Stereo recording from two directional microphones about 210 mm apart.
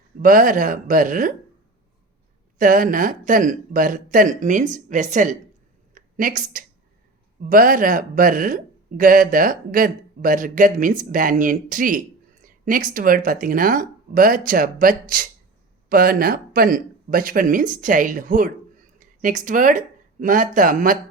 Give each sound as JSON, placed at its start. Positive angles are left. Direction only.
{"t": 0.2, "sound": "speech", "side_deg": -40}
{"t": 2.6, "sound": "speech", "side_deg": -40}
{"t": 5.9, "sound": "a sound", "side_deg": -40}
{"t": 7.4, "sound": "speech", "side_deg": -40}